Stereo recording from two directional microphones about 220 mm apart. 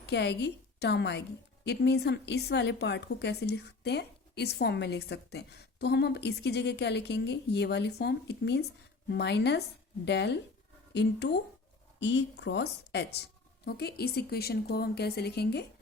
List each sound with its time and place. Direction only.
0.0 s a woman's voice: 50° left (ahead or behind)